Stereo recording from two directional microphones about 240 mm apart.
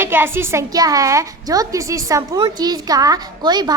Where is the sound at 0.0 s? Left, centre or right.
Centre.